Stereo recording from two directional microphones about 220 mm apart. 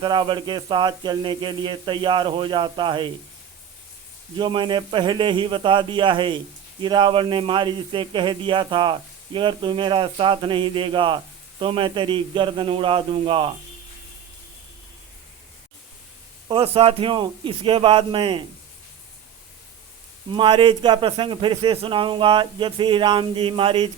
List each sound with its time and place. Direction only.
0.0 s speech: 20° right (ahead or behind)
4.4 s speech: 20° right (ahead or behind)
16.5 s speech: 25° right (ahead or behind)
20.3 s speech: 20° right (ahead or behind)